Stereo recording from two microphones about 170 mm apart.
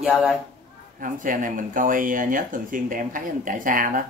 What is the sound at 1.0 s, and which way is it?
Speech, 50° right (ahead or behind).